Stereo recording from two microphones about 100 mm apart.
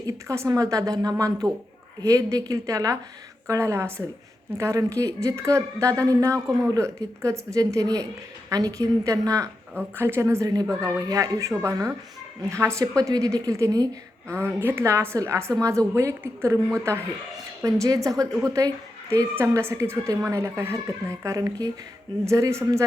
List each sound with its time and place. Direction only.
0.3 s a woman's voice: 35° right (ahead or behind)
9.7 s a woman's voice: 25° right (ahead or behind)
17.6 s a woman's voice: 35° right (ahead or behind)